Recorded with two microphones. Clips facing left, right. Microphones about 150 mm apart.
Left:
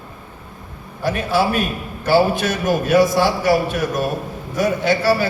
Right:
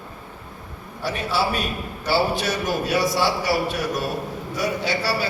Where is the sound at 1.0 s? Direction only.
50° left (ahead or behind).